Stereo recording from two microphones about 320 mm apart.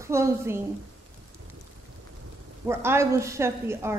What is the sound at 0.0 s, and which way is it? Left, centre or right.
Speech, centre.